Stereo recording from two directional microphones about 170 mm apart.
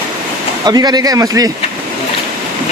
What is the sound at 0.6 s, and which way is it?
Speech, 25° right (ahead or behind).